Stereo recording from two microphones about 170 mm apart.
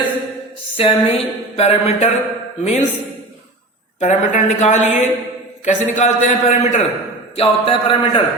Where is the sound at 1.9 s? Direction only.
40° left (ahead or behind).